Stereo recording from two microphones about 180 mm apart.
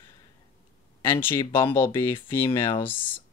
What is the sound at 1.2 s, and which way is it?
Speech, 30° left (ahead or behind).